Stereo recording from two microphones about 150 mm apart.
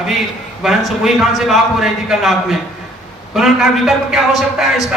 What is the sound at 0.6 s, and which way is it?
A man's voice, centre (ahead or behind).